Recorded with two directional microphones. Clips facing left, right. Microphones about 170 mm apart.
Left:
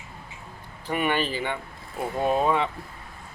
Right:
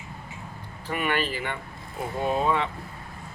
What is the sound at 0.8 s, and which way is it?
Speech, 20° left (ahead or behind).